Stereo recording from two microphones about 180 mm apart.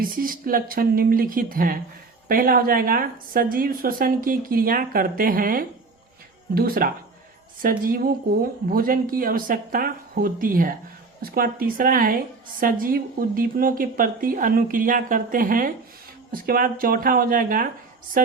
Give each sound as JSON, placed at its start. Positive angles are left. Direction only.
{"t": 0.0, "sound": "a woman's voice", "side_deg": -50}